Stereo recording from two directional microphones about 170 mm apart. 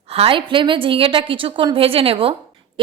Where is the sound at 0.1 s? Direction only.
35° right (ahead or behind).